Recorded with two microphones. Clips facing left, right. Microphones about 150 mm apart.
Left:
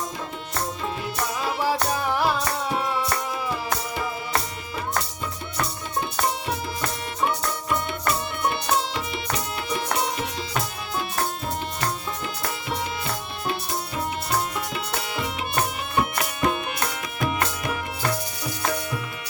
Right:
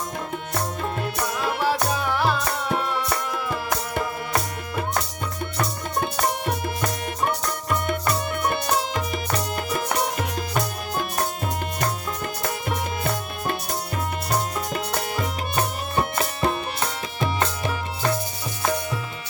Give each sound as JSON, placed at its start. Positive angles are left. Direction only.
{"t": 1.0, "sound": "music", "side_deg": -60}
{"t": 2.1, "sound": "music", "side_deg": 15}
{"t": 9.6, "sound": "music", "side_deg": -45}
{"t": 12.4, "sound": "music", "side_deg": -50}
{"t": 16.0, "sound": "music", "side_deg": -30}